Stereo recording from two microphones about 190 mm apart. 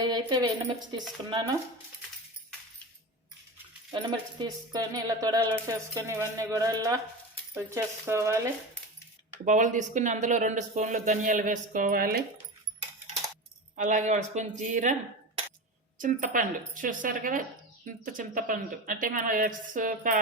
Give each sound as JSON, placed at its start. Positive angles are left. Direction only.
{"t": 0.0, "sound": "speech", "side_deg": -25}
{"t": 3.9, "sound": "speech", "side_deg": -20}
{"t": 9.4, "sound": "speech", "side_deg": -40}
{"t": 13.7, "sound": "speech", "side_deg": -40}
{"t": 16.0, "sound": "speech", "side_deg": -45}